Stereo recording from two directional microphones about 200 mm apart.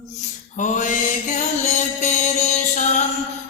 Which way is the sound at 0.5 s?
40° left (ahead or behind).